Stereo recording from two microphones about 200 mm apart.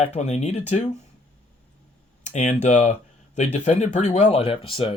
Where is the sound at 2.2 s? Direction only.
35° left (ahead or behind).